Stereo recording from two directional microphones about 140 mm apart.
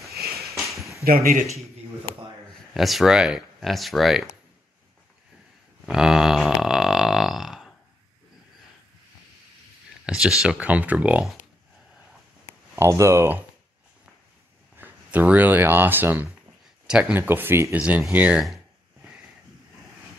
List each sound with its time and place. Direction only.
1.0 s speech: 90° right
2.7 s speech: centre (ahead or behind)
5.9 s burping: 5° right (ahead or behind)
10.0 s speech: 5° right (ahead or behind)
12.4 s a sound: 20° right (ahead or behind)
14.8 s speech: 10° right (ahead or behind)